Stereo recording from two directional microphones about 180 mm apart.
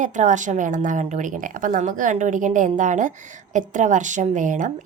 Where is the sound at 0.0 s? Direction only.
45° right (ahead or behind).